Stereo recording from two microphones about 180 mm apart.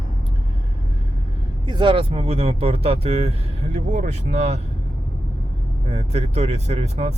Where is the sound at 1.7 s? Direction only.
25° right (ahead or behind).